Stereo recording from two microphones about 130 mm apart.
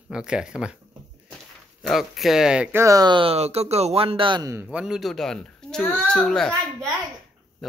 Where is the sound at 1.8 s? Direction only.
Centre (ahead or behind).